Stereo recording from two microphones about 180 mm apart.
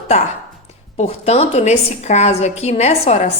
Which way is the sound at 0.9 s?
35° left (ahead or behind).